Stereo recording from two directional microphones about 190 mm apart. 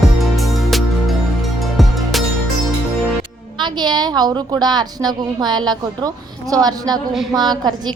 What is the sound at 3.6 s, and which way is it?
A woman's voice, 20° right (ahead or behind).